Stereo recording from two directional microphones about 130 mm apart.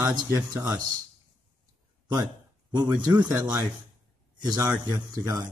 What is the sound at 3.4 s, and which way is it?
Speech, 20° right (ahead or behind).